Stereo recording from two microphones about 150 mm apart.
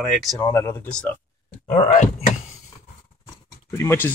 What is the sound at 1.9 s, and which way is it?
Speech, 55° left (ahead or behind).